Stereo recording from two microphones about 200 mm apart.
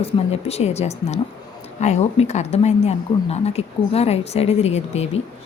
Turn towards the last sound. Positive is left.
turn(degrees=30)  # may be behind; listen again after turning